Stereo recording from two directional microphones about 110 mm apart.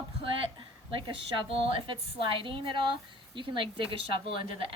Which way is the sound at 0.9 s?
50° right (ahead or behind).